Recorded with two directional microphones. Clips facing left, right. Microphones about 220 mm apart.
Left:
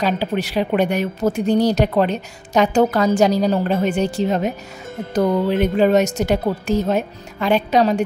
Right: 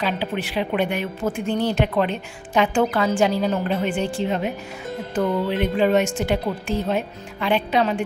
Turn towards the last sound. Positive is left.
turn(degrees=40)  # may be behind; listen again after turning